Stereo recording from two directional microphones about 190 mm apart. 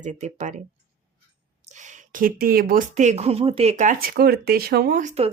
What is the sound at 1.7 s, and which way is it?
Speech, 40° right (ahead or behind).